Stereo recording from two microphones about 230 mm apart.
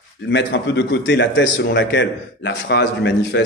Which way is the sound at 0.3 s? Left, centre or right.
Left.